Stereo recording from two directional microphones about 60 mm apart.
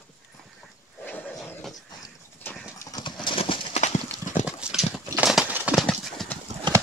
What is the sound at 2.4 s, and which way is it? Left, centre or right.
Clip-clop, left.